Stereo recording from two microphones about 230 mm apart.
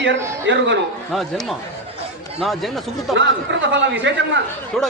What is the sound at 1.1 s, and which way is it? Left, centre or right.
Speech, centre.